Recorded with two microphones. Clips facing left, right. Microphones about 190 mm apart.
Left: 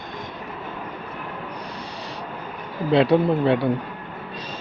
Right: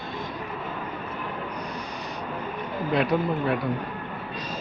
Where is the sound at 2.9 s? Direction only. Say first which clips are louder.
Left 7 dB; 30° left (ahead or behind).